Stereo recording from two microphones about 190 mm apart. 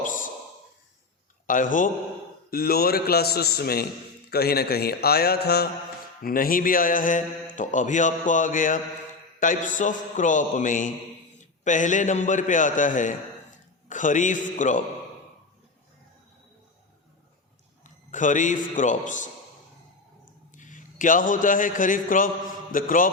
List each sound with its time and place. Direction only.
0.0 s a sound: 45° left (ahead or behind)
1.5 s a man's voice: 45° left (ahead or behind)
18.1 s a man's voice: 40° left (ahead or behind)
20.5 s a man's voice: 40° left (ahead or behind)